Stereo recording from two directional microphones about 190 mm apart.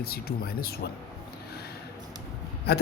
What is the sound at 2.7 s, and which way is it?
Speech, 55° left (ahead or behind).